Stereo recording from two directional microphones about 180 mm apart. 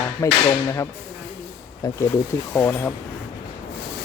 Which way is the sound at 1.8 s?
20° left (ahead or behind).